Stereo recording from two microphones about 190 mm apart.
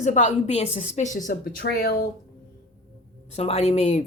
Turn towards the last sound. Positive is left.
turn(degrees=35)  # may be behind; listen again after turning